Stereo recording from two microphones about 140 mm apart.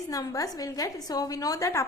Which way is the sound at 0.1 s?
25° left (ahead or behind).